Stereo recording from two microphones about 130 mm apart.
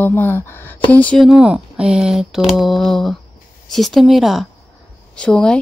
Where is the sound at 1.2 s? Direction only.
10° right (ahead or behind).